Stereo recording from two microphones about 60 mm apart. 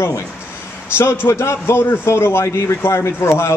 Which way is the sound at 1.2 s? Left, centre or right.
Left.